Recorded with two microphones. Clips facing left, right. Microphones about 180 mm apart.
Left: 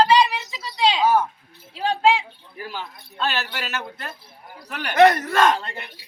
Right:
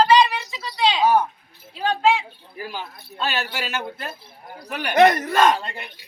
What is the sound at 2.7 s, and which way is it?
A man's voice, 10° right (ahead or behind).